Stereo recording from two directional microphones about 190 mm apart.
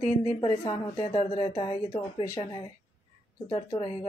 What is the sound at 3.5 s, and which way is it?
Speech, 30° left (ahead or behind).